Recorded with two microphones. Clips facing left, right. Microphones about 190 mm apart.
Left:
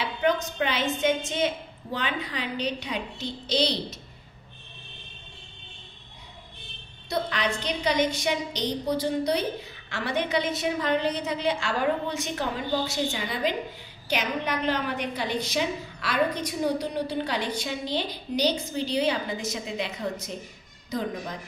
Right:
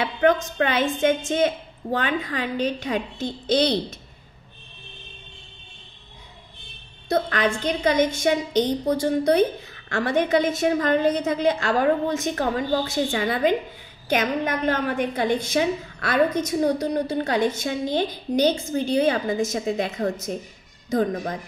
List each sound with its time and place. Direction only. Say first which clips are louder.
0.0 s a woman's voice: right 5 dB; 50° right (ahead or behind)
7.1 s a woman's voice: right 6 dB; 50° right (ahead or behind)